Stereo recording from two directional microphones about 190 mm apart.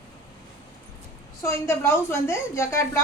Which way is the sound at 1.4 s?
15° left (ahead or behind).